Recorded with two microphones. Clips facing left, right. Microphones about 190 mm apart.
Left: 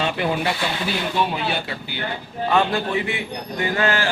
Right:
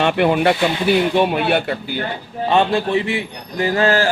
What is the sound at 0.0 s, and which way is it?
Speech, 60° right (ahead or behind).